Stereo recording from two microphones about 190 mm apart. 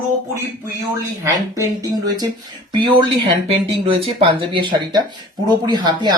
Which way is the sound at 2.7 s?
25° right (ahead or behind).